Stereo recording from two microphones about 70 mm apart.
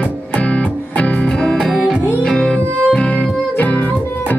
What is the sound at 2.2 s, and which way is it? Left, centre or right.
Music, centre.